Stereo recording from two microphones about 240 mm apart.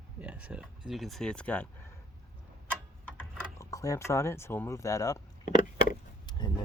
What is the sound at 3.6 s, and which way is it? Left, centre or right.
Speech, centre.